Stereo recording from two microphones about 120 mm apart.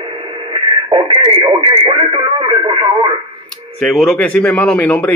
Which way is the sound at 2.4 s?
50° right (ahead or behind).